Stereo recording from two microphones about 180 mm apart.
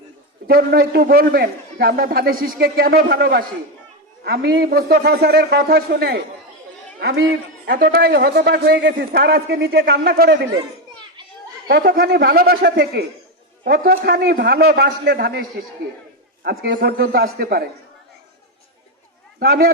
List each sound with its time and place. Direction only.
0.4 s a man's voice: 60° right (ahead or behind)
11.7 s a man's voice: 60° right (ahead or behind)
19.4 s a man's voice: 60° right (ahead or behind)